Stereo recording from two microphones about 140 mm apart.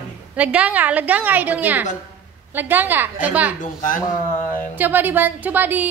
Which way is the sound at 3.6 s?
70° left (ahead or behind).